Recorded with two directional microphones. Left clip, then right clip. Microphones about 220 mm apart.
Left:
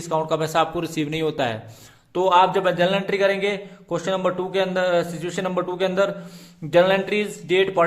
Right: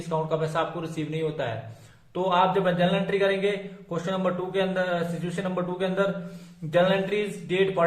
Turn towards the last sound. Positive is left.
turn(degrees=45)  # may be behind; listen again after turning